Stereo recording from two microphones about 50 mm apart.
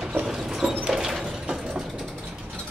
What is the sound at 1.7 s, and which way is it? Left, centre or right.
Vehicle, centre.